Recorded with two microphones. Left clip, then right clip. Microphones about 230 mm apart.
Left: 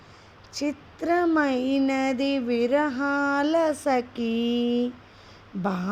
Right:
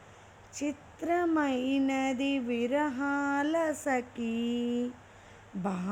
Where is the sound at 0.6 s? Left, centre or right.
Left.